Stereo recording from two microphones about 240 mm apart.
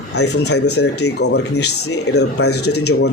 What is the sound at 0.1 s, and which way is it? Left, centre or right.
Speech, left.